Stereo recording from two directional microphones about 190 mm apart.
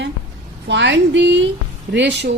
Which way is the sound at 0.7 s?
70° right (ahead or behind).